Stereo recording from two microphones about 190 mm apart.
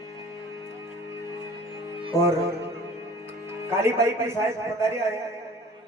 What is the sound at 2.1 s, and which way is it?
Music, centre (ahead or behind).